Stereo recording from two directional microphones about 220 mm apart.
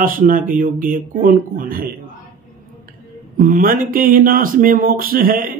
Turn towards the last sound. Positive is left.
turn(degrees=-40)  # may be behind; listen again after turning